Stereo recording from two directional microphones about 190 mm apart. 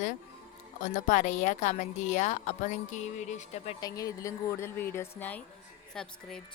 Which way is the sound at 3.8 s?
20° left (ahead or behind).